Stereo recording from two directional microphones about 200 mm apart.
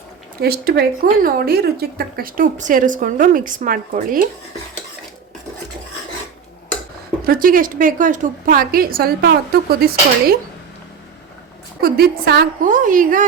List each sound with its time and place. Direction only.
0.4 s a woman's voice: 50° right (ahead or behind)
7.3 s a woman's voice: 45° right (ahead or behind)
11.8 s a woman's voice: 50° right (ahead or behind)